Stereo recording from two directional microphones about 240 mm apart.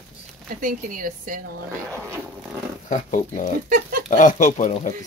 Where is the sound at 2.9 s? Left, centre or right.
Left.